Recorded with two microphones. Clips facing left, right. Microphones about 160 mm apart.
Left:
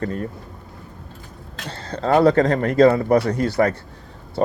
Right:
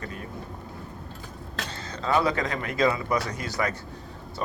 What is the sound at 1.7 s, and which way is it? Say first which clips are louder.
Speech: left 8 dB; 65° left (ahead or behind).